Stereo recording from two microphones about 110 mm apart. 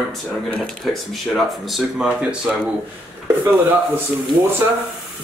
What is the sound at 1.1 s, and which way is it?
Speech, centre (ahead or behind).